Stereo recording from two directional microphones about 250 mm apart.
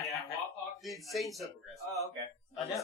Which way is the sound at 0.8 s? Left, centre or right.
Centre.